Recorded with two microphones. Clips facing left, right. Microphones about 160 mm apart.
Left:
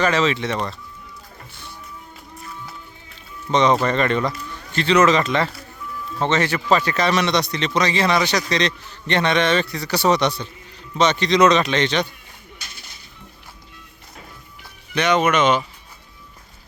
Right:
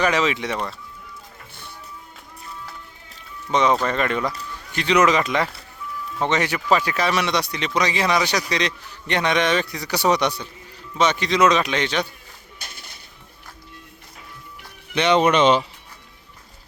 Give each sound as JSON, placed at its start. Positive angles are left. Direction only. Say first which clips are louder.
{"t": 0.0, "sound": "a man's voice", "louder": "left 2 dB", "side_deg": -10}
{"t": 3.5, "sound": "a man's voice", "louder": "left 2 dB", "side_deg": -5}
{"t": 12.6, "sound": "music", "louder": "right 1 dB", "side_deg": -55}
{"t": 14.9, "sound": "speech", "louder": "right 1 dB", "side_deg": -30}